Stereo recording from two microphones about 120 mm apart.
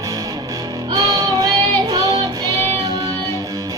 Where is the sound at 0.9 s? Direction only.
30° right (ahead or behind).